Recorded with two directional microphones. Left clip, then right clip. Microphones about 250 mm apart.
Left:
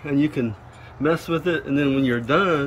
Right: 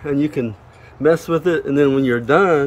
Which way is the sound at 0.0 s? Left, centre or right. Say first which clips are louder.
Right 3 dB; centre.